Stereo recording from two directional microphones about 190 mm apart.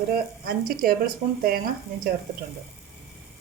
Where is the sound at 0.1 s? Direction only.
50° right (ahead or behind).